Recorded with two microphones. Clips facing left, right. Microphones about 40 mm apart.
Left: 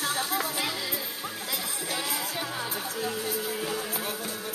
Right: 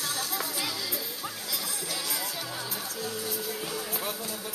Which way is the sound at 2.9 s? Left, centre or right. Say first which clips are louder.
Left 4 dB; left.